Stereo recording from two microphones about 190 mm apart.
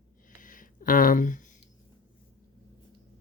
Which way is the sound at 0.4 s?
45° left (ahead or behind).